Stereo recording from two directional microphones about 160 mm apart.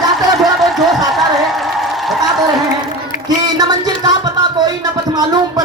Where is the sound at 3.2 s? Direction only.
25° right (ahead or behind).